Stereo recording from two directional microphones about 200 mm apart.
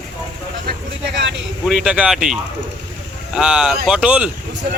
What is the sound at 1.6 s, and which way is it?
Speech, 5° right (ahead or behind).